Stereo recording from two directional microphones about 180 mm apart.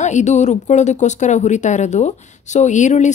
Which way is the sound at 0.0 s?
40° left (ahead or behind).